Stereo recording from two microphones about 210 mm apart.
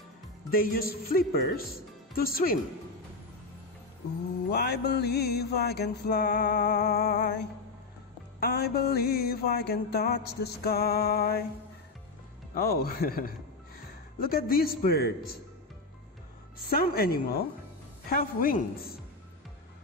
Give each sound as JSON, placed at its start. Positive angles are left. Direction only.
{"t": 0.5, "sound": "mantra", "side_deg": 45}
{"t": 1.8, "sound": "speech", "side_deg": 45}
{"t": 4.5, "sound": "mantra", "side_deg": 50}
{"t": 8.4, "sound": "mantra", "side_deg": 45}
{"t": 12.5, "sound": "mantra", "side_deg": 45}
{"t": 16.6, "sound": "mantra", "side_deg": 45}